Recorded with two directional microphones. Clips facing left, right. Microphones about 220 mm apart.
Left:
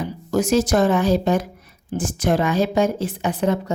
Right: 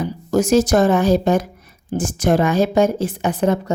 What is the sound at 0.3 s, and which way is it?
Speech, 45° right (ahead or behind).